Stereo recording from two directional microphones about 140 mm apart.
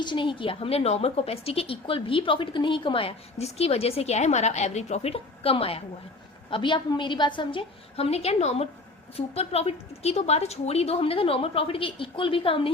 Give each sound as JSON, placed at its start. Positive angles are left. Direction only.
{"t": 0.0, "sound": "a woman's voice", "side_deg": 35}